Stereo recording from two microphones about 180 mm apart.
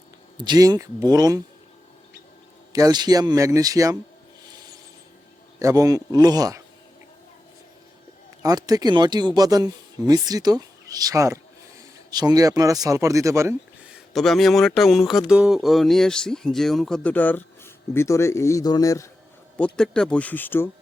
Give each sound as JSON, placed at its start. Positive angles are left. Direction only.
{"t": 0.3, "sound": "speech", "side_deg": -25}
{"t": 2.7, "sound": "speech", "side_deg": -20}
{"t": 4.4, "sound": "rub", "side_deg": -20}
{"t": 5.5, "sound": "speech", "side_deg": -20}
{"t": 8.4, "sound": "speech", "side_deg": -20}
{"t": 19.5, "sound": "speech", "side_deg": 5}